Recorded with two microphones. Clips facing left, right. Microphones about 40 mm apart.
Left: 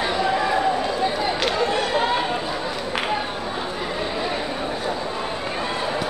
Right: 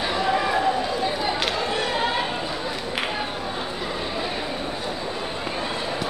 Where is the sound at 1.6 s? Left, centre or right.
Centre.